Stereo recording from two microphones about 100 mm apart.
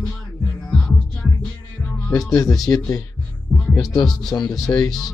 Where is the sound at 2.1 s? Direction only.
30° left (ahead or behind).